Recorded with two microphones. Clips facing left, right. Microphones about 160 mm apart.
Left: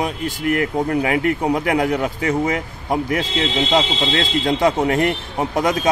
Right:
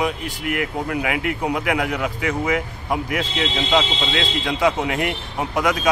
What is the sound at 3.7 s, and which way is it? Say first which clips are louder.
Speech: even; 40° left (ahead or behind).